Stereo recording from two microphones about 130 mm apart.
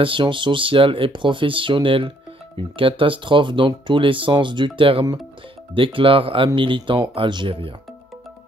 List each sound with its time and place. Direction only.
0.0 s speech: 40° right (ahead or behind)